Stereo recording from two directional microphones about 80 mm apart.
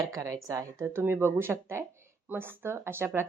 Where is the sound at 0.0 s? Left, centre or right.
Right.